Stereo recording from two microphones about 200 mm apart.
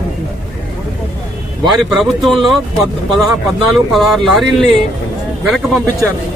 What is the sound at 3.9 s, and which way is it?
Speech, centre (ahead or behind).